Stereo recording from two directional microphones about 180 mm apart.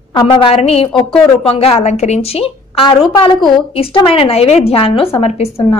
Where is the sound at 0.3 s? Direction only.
30° left (ahead or behind).